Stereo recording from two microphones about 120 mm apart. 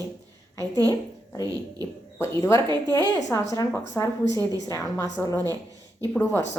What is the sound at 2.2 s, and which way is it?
Speech, 25° left (ahead or behind).